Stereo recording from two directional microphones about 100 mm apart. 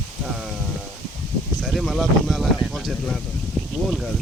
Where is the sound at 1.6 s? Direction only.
Centre (ahead or behind).